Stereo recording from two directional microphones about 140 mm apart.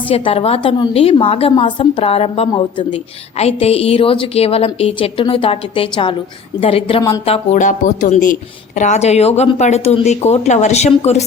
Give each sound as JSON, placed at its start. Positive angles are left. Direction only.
{"t": 0.1, "sound": "a woman's voice", "side_deg": 45}
{"t": 7.6, "sound": "a woman's voice", "side_deg": 65}